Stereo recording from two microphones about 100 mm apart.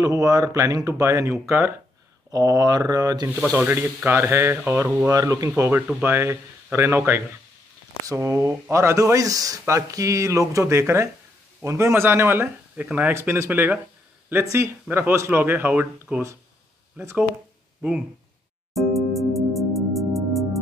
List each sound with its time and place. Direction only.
0.0 s speech: 40° right (ahead or behind)
2.3 s speech: 40° right (ahead or behind)
3.5 s speech: 25° right (ahead or behind)
5.1 s speech: 35° right (ahead or behind)
5.6 s speech: 20° right (ahead or behind)
18.8 s music: centre (ahead or behind)